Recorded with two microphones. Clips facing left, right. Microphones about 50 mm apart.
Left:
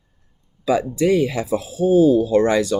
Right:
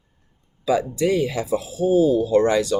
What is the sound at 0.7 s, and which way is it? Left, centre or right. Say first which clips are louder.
Speech: left 2 dB; left.